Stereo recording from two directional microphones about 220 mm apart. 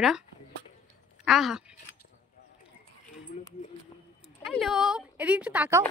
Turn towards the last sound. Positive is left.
turn(degrees=-10)  # may be behind; listen again after turning